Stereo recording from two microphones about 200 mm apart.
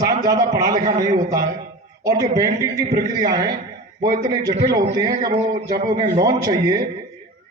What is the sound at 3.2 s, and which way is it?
A man's voice, 20° right (ahead or behind).